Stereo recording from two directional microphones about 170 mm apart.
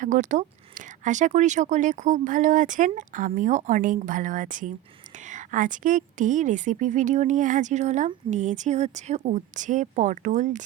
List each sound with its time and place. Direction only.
0.0 s a woman's voice: 45° right (ahead or behind)